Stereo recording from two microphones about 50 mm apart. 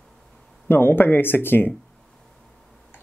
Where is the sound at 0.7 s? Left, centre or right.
Left.